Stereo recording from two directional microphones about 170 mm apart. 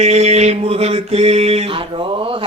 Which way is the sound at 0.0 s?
40° right (ahead or behind).